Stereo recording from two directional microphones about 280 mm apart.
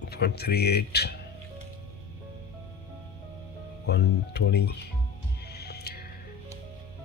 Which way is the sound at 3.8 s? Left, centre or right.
Left.